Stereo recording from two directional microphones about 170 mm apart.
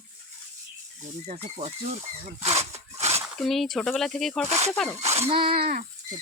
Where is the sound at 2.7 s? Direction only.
40° right (ahead or behind).